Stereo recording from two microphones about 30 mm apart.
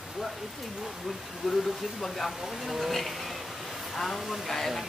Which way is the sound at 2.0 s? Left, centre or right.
Centre.